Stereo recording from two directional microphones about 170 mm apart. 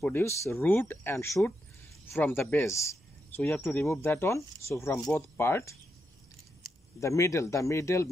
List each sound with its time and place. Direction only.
0.0 s speech: 15° left (ahead or behind)
7.0 s speech: 15° left (ahead or behind)